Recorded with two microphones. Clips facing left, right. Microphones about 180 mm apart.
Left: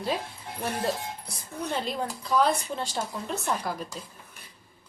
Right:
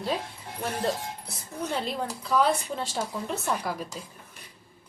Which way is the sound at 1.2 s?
Centre (ahead or behind).